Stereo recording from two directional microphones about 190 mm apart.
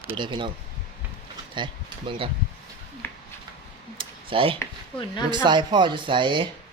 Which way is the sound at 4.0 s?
25° right (ahead or behind).